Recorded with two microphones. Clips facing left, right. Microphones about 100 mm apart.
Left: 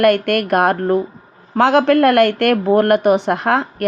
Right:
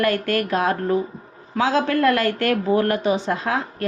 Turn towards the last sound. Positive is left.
turn(degrees=65)  # may be behind; listen again after turning